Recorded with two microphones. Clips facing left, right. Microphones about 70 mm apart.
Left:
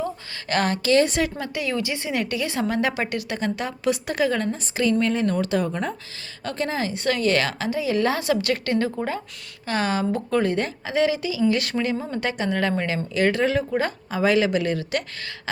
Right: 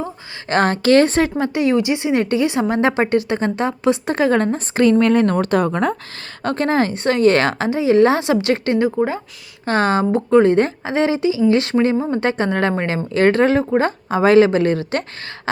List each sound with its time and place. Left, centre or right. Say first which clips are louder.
0.5 s speech: right 6 dB; right
6.4 s speech: right 8 dB; right
7.0 s a woman's voice: right 6 dB; right
9.6 s speech: right 7 dB; right